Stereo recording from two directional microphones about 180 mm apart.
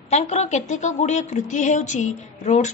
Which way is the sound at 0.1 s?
40° left (ahead or behind).